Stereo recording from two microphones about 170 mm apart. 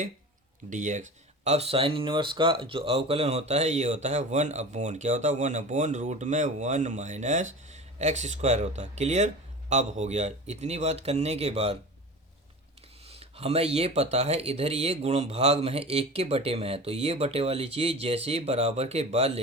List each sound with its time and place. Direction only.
0.7 s speech: 50° right (ahead or behind)
1.5 s speech: 35° right (ahead or behind)
13.1 s speech: 35° right (ahead or behind)